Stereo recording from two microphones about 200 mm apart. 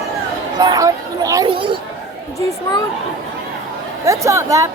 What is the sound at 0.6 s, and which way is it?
Speech, 20° right (ahead or behind).